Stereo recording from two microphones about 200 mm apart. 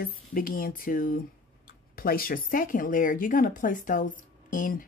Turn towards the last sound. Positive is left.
turn(degrees=40)  # may be behind; listen again after turning